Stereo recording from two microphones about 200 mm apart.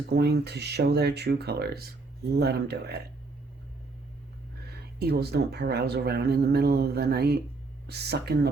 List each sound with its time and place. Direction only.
0.1 s speech: 55° right (ahead or behind)
4.9 s speech: 55° right (ahead or behind)